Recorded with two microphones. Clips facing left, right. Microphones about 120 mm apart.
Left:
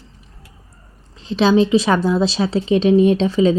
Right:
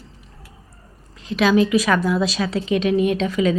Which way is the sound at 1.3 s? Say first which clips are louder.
Left 3 dB; 30° left (ahead or behind).